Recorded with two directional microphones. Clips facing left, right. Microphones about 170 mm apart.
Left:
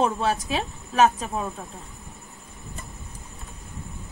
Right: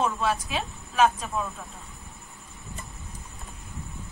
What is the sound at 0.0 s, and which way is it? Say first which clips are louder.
A woman's voice: left 3 dB; 40° left (ahead or behind).